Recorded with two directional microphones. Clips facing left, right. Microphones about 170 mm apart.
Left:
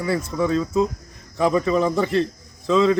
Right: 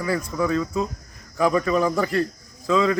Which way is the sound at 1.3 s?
25° left (ahead or behind).